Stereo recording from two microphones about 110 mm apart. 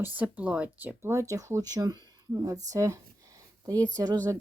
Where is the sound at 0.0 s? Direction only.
15° right (ahead or behind); by 4.2 s 40° right (ahead or behind).